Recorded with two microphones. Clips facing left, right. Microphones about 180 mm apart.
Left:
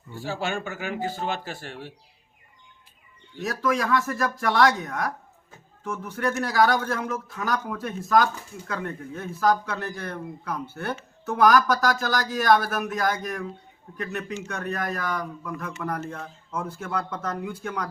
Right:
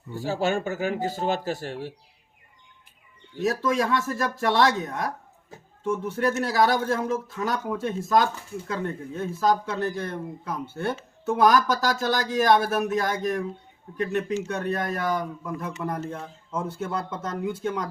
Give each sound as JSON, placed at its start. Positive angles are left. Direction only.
{"t": 0.1, "sound": "speech", "side_deg": -40}
{"t": 3.4, "sound": "speech", "side_deg": -25}